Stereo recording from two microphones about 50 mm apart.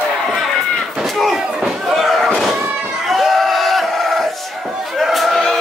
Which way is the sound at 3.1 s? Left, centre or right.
Centre.